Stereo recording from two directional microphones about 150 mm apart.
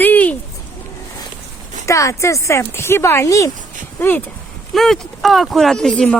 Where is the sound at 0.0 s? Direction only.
10° left (ahead or behind).